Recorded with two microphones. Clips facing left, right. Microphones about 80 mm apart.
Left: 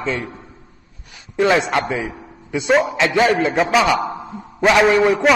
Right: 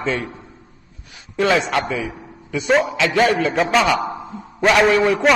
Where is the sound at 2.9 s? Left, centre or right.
Left.